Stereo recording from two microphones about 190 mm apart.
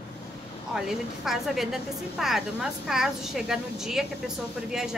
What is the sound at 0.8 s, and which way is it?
A woman's voice, centre (ahead or behind).